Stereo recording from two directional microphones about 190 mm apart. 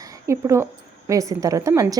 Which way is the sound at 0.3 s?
15° right (ahead or behind).